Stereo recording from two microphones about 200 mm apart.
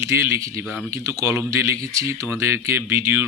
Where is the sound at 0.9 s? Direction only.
15° right (ahead or behind).